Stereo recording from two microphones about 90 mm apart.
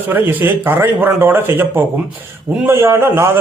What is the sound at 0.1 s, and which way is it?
A man's voice, 25° right (ahead or behind).